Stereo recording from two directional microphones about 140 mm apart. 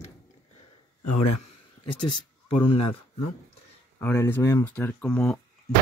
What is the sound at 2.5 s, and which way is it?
Speech, 40° left (ahead or behind).